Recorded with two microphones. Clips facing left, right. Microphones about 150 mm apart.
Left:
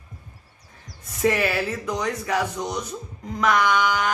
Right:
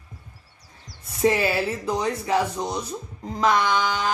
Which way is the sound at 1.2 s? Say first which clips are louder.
Right 1 dB; 25° right (ahead or behind).